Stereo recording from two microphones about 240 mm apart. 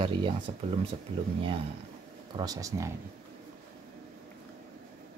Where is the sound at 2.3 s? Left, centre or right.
Centre.